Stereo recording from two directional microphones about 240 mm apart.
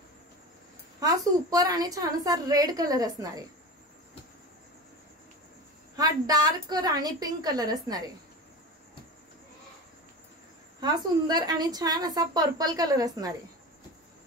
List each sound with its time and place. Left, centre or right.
0.9 s a woman's voice: centre
5.9 s a woman's voice: centre
10.8 s a woman's voice: centre